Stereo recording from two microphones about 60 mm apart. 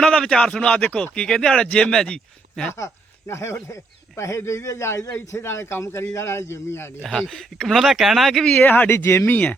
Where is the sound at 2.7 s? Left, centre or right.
Left.